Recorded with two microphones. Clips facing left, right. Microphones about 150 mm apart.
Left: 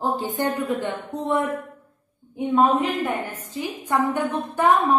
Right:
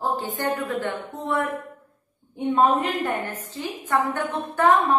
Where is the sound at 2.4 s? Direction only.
Centre (ahead or behind).